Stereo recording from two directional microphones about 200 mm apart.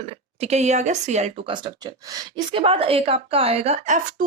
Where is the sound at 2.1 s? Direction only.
25° right (ahead or behind).